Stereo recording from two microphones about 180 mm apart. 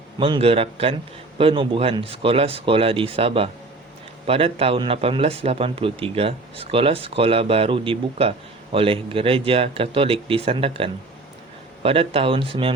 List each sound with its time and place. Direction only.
0.2 s speech: 30° right (ahead or behind)